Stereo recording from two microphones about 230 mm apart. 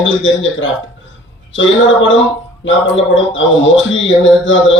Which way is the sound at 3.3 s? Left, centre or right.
Left.